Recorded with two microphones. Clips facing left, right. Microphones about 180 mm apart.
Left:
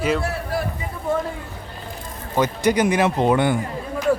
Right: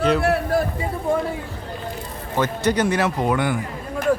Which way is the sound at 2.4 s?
10° left (ahead or behind).